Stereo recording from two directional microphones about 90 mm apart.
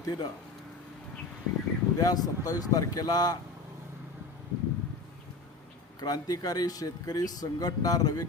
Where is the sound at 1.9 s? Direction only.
45° left (ahead or behind).